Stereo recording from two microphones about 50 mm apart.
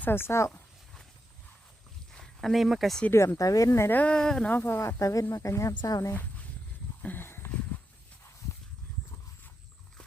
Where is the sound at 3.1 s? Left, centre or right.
Left.